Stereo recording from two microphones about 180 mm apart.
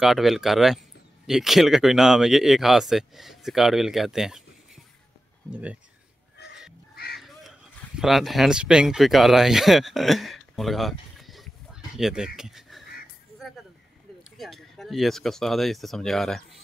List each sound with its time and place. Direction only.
0.0 s speech: centre (ahead or behind)
7.2 s speech: centre (ahead or behind)
12.4 s a sound: centre (ahead or behind)
14.4 s speech: centre (ahead or behind)